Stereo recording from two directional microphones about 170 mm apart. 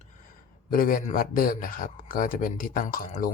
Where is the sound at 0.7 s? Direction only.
55° left (ahead or behind).